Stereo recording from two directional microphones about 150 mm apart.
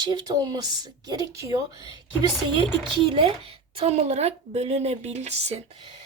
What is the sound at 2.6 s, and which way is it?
Speech, 35° right (ahead or behind).